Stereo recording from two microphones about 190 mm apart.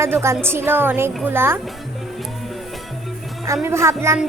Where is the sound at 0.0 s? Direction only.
15° right (ahead or behind).